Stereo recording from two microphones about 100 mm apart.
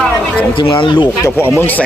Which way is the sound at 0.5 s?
60° left (ahead or behind).